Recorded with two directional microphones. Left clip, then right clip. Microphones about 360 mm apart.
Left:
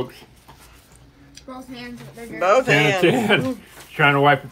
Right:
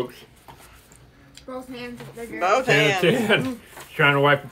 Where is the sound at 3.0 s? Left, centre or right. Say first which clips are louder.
Left 2 dB; centre.